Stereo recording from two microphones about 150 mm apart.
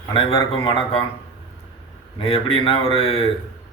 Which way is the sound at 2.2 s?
35° left (ahead or behind).